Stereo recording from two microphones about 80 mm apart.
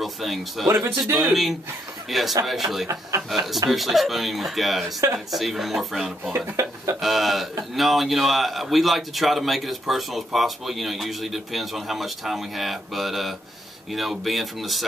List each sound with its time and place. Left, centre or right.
0.0 s a man's voice: centre
0.7 s speech: right
2.0 s a man's voice: centre
6.5 s speech: right
7.0 s a man's voice: centre